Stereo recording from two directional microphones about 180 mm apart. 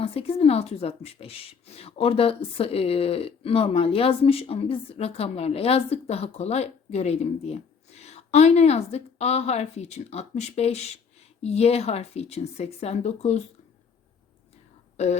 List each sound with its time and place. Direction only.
0.0 s speech: 35° left (ahead or behind)